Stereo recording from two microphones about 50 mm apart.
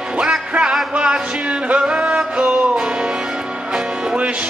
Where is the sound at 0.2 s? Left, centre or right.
Centre.